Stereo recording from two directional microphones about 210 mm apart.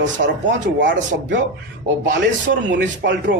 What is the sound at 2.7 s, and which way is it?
Speech, 55° right (ahead or behind).